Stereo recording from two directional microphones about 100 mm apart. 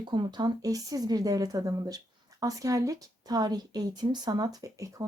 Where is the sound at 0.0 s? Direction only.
50° right (ahead or behind).